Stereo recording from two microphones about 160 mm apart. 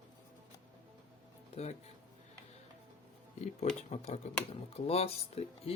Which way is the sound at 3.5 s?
45° left (ahead or behind).